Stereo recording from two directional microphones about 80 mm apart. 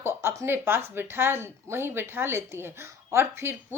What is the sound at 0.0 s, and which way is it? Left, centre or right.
Speech, right.